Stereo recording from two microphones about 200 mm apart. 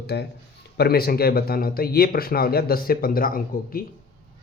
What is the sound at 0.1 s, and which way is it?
Speech, 55° left (ahead or behind).